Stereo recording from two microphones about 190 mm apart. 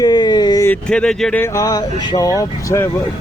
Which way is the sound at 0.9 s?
5° left (ahead or behind).